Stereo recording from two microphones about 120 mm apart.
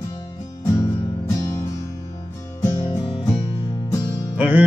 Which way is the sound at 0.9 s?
50° left (ahead or behind).